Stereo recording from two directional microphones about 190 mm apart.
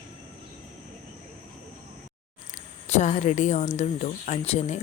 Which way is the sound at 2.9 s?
40° left (ahead or behind).